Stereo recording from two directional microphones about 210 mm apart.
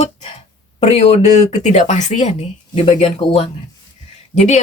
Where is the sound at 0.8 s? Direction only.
30° left (ahead or behind).